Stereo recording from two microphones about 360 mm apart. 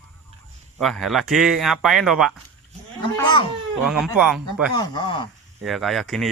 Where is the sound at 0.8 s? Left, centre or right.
Centre.